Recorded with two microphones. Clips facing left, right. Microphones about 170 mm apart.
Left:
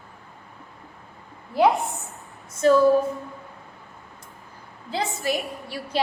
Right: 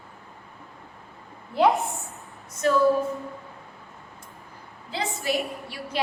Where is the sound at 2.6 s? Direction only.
30° left (ahead or behind).